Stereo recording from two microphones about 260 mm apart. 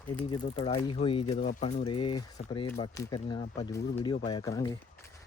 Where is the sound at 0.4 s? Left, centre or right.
Left.